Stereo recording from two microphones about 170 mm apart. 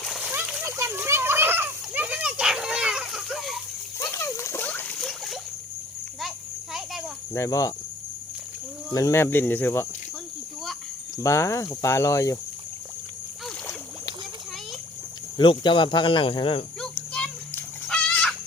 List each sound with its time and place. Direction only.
0.0 s splash: 5° right (ahead or behind)
3.9 s splash: 15° left (ahead or behind); by 5.4 s centre (ahead or behind)
7.3 s speech: 20° left (ahead or behind)
8.9 s cricket: 20° left (ahead or behind)
11.2 s cricket: 15° left (ahead or behind)
15.4 s speech: 30° left (ahead or behind)
16.8 s a sound: 5° left (ahead or behind)